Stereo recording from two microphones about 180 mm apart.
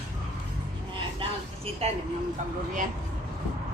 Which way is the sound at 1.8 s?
35° right (ahead or behind).